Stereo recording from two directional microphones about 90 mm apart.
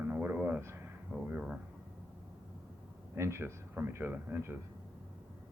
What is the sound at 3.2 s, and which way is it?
Speech, 30° right (ahead or behind).